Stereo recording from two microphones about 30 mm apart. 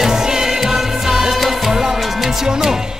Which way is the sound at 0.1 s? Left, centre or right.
Centre.